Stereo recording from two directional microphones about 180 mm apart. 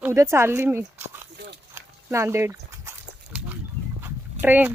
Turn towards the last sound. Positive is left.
turn(degrees=-10)  # may be behind; listen again after turning